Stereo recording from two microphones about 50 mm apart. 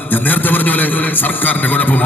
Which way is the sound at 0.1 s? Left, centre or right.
Left.